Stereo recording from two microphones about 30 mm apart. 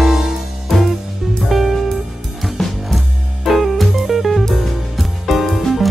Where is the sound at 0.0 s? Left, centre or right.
Centre.